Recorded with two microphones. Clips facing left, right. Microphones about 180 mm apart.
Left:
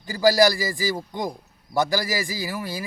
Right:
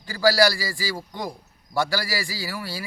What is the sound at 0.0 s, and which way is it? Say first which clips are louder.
A man's voice: left 2 dB; 20° left (ahead or behind).